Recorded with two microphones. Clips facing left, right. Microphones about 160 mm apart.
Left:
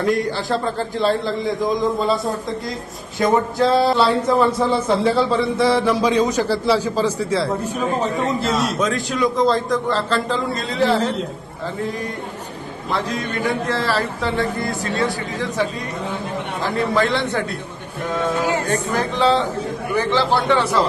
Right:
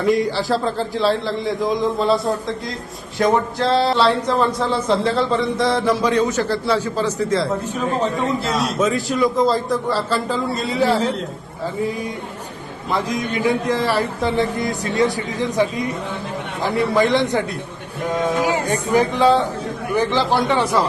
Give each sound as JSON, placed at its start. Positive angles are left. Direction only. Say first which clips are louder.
{"t": 0.0, "sound": "a man's voice", "louder": "right 2 dB", "side_deg": 0}
{"t": 12.9, "sound": "a man's voice", "louder": "right 2 dB", "side_deg": -10}